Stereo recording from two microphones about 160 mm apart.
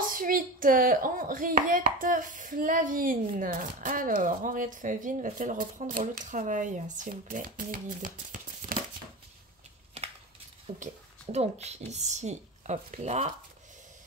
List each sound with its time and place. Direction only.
0.0 s speech: 60° right (ahead or behind)
10.7 s speech: 40° right (ahead or behind)